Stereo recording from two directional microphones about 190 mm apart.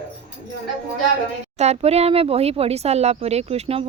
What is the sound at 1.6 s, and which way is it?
Speech, 35° right (ahead or behind).